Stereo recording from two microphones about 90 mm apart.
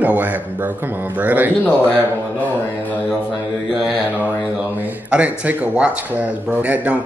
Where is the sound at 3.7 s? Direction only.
15° right (ahead or behind).